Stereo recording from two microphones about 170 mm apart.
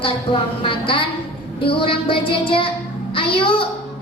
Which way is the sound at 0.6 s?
30° left (ahead or behind).